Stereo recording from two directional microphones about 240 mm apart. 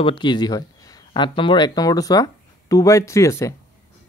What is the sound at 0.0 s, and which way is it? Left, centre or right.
Speech, centre.